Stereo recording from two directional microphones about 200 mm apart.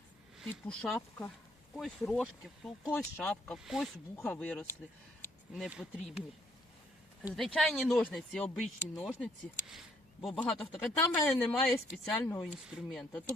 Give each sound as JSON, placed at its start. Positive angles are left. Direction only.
{"t": 0.3, "sound": "speech", "side_deg": 0}